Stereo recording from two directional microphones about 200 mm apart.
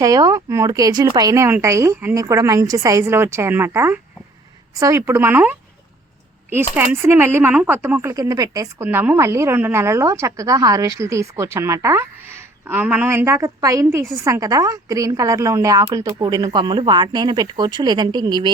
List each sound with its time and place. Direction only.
0.0 s speech: 15° right (ahead or behind)
6.7 s a woman's voice: 15° right (ahead or behind)